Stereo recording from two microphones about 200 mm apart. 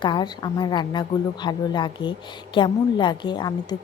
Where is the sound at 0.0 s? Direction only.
20° left (ahead or behind).